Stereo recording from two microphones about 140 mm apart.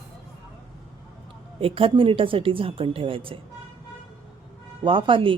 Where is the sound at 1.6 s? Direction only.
40° right (ahead or behind).